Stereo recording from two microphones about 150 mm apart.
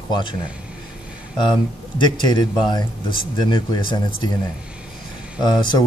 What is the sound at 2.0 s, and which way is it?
Speech, 30° left (ahead or behind).